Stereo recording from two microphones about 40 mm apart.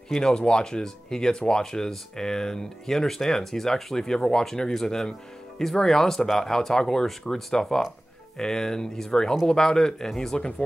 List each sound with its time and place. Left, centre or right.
0.1 s speech: centre